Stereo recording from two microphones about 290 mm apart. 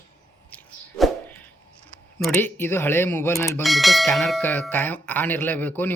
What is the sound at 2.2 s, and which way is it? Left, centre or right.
Speech, centre.